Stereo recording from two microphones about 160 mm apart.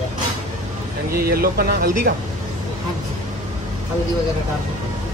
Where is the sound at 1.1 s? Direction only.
70° right (ahead or behind).